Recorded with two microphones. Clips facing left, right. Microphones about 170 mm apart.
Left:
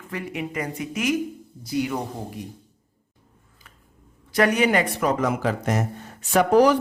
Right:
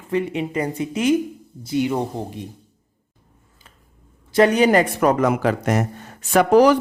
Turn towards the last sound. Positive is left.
turn(degrees=-85)